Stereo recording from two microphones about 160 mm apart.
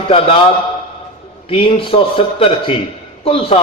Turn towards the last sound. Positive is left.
turn(degrees=35)  # may be behind; listen again after turning